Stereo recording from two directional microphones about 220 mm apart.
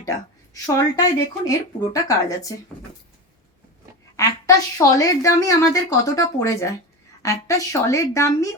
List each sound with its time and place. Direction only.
0.5 s a woman's voice: 15° left (ahead or behind)
4.2 s a woman's voice: 15° left (ahead or behind)